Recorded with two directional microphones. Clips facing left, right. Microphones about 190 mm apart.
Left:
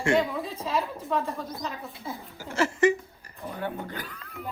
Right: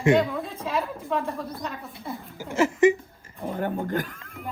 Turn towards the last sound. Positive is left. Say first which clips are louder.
# right 9 dB
turn(degrees=-45)  # may be behind; listen again after turning